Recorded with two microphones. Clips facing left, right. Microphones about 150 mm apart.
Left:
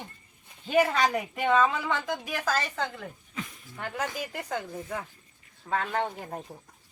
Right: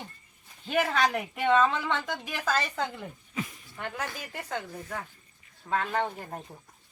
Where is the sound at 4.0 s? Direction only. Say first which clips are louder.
Left 4 dB; 15° left (ahead or behind).